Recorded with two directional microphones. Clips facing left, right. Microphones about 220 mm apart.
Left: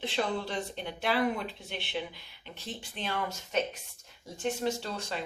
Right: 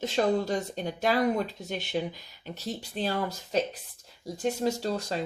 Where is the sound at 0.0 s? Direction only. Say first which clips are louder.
Right 6 dB; 40° right (ahead or behind).